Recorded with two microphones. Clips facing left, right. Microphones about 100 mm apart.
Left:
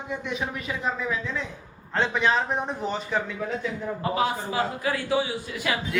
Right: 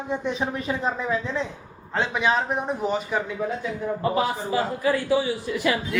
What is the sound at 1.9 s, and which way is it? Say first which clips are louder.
A man's voice: even; 10° right (ahead or behind).